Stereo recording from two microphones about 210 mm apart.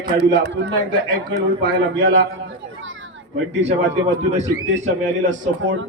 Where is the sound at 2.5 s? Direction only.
65° right (ahead or behind).